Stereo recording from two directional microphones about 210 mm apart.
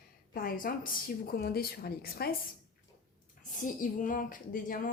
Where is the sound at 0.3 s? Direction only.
45° left (ahead or behind).